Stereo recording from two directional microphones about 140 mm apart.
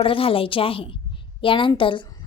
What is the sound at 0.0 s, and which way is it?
A woman's voice, 40° left (ahead or behind).